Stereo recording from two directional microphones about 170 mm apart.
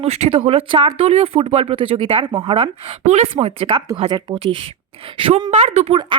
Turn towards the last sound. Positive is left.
turn(degrees=-35)  # may be behind; listen again after turning